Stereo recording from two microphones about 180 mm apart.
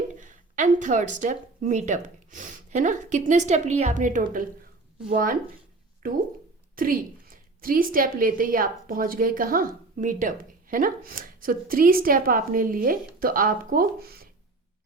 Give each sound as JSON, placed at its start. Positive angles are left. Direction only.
{"t": 0.1, "sound": "a woman's voice", "side_deg": -45}
{"t": 6.7, "sound": "a woman's voice", "side_deg": -50}